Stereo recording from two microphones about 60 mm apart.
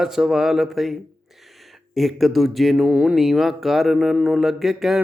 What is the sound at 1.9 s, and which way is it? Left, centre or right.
Mantra, centre.